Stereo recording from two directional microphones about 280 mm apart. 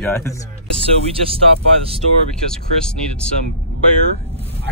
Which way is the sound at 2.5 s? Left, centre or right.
Centre.